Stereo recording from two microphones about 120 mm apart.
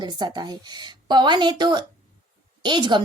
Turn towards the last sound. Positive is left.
turn(degrees=-40)  # may be behind; listen again after turning